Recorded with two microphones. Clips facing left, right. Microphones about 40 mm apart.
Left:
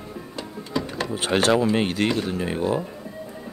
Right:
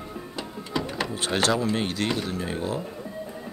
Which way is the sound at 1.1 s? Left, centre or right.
Centre.